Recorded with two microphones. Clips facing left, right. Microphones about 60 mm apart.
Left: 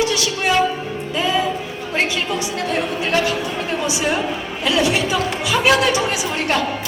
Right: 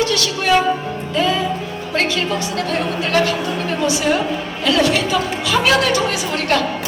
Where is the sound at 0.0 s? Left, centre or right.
Centre.